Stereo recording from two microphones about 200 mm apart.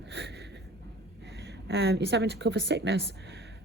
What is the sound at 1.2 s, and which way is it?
A woman's voice, 60° right (ahead or behind).